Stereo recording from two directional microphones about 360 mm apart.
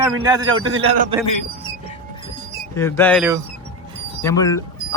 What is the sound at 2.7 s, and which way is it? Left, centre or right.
Speech, centre.